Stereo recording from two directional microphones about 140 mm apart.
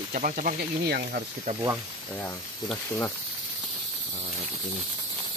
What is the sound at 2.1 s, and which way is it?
Speech, 15° left (ahead or behind).